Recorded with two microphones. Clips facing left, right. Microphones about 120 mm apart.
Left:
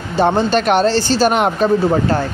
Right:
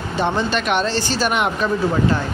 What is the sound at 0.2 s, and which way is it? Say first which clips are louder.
Speech: left 6 dB; 35° left (ahead or behind).